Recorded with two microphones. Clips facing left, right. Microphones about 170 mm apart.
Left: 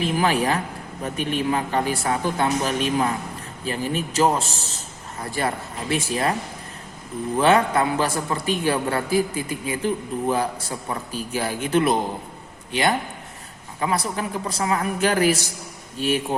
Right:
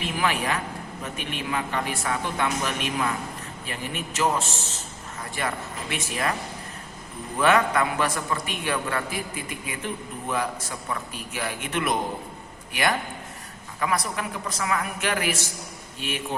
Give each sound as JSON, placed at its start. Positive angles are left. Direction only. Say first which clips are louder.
{"t": 0.0, "sound": "a man's voice", "louder": "left 5 dB", "side_deg": 35}
{"t": 7.3, "sound": "a man's voice", "louder": "left 3 dB", "side_deg": 30}